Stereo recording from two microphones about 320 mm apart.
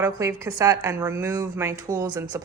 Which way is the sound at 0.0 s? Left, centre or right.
Centre.